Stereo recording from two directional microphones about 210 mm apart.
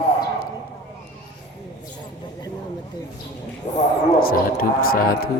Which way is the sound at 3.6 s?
35° left (ahead or behind).